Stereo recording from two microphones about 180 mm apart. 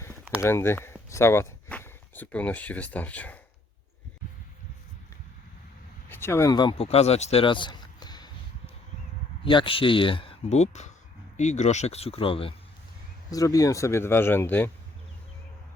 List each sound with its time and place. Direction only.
0.4 s speech: 15° left (ahead or behind)
6.1 s a man's voice: 10° left (ahead or behind)
9.4 s speech: 30° left (ahead or behind)
13.3 s speech: 20° left (ahead or behind)